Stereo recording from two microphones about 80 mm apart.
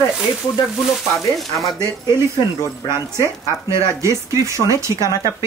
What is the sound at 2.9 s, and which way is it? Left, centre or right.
Speech, right.